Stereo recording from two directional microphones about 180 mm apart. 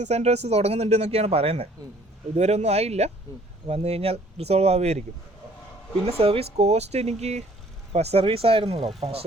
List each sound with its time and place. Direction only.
0.0 s speech: 35° right (ahead or behind)
6.1 s speech: 35° right (ahead or behind)